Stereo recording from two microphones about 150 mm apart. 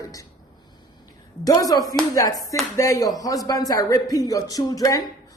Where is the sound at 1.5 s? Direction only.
25° left (ahead or behind).